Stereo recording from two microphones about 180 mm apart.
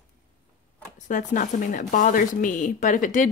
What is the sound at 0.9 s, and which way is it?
Speech, 45° left (ahead or behind).